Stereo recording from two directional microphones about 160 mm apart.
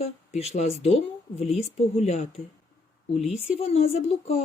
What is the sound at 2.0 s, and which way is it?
Speech, 40° left (ahead or behind).